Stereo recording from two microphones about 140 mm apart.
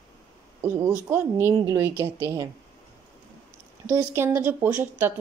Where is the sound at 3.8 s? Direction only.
20° right (ahead or behind).